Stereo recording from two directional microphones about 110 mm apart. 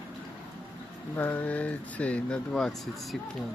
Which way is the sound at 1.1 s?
15° left (ahead or behind).